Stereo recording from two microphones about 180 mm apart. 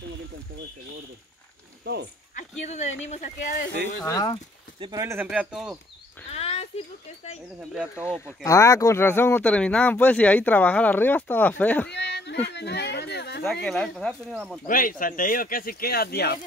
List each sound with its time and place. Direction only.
1.8 s speech: 65° right (ahead or behind)
2.3 s speech: 40° left (ahead or behind)
4.0 s speech: 20° left (ahead or behind)
4.7 s speech: 25° right (ahead or behind)
5.0 s speech: 10° right (ahead or behind)
6.3 s a sound: 35° left (ahead or behind)
7.7 s speech: 5° right (ahead or behind)
8.5 s speech: 15° left (ahead or behind)
11.9 s a sound: 70° left (ahead or behind)
13.4 s speech: centre (ahead or behind)
14.7 s speech: 50° left (ahead or behind)